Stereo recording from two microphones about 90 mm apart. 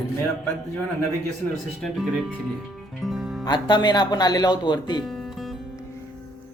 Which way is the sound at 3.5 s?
55° left (ahead or behind).